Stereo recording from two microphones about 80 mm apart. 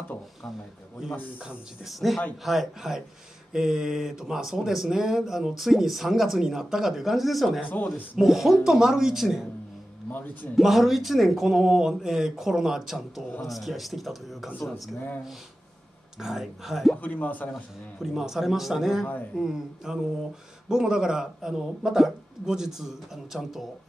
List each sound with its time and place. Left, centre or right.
1.9 s speech: centre
10.5 s speech: centre
16.2 s speech: centre
16.9 s a man's voice: left
18.0 s speech: centre